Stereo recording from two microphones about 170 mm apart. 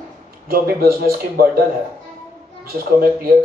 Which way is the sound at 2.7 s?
60° right (ahead or behind).